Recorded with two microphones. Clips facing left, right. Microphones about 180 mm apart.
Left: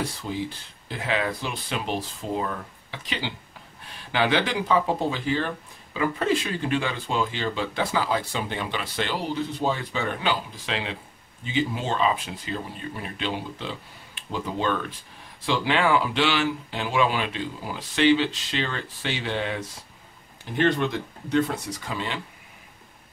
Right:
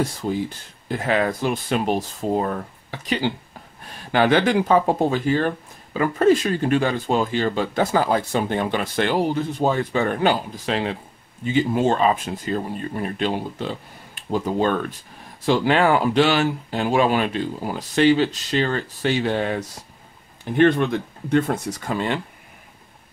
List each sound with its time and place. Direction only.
0.0 s speech: 45° right (ahead or behind)